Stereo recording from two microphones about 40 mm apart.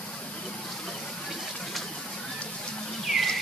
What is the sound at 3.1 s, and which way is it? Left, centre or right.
Music, centre.